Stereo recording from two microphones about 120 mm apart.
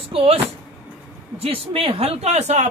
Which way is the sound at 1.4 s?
50° right (ahead or behind).